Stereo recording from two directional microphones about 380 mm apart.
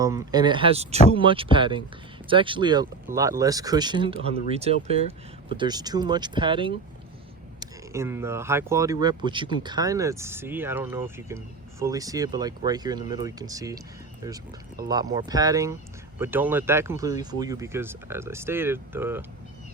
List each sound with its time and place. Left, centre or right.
0.0 s speech: centre